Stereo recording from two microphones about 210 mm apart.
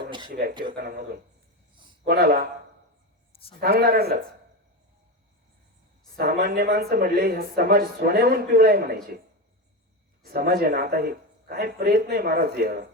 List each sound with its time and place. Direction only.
0.3 s speech: 45° right (ahead or behind)
1.7 s a sound: 20° right (ahead or behind)
2.0 s speech: 45° right (ahead or behind)
3.6 s speech: 45° right (ahead or behind)
6.1 s speech: 50° right (ahead or behind)
10.2 s speech: 45° right (ahead or behind)